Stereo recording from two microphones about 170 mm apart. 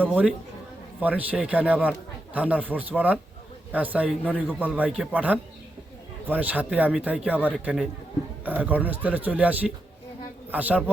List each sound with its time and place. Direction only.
0.0 s a man's voice: 10° right (ahead or behind)